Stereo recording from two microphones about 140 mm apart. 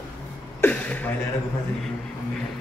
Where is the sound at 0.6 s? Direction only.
10° left (ahead or behind).